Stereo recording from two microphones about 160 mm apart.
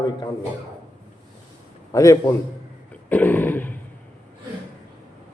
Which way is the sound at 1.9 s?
20° left (ahead or behind).